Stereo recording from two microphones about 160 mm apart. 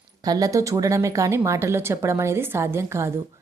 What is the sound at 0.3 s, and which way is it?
Speech, 20° right (ahead or behind).